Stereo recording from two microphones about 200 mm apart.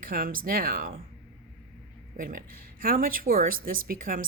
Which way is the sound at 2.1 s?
45° right (ahead or behind).